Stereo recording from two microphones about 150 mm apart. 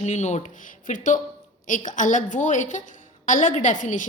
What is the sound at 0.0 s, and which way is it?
A woman's voice, 50° left (ahead or behind).